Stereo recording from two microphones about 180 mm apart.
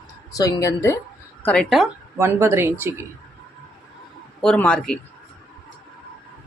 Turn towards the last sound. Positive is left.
turn(degrees=5)  # may be behind; listen again after turning